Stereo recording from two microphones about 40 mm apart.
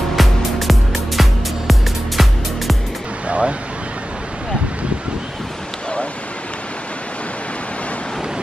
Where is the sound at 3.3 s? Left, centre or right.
Right.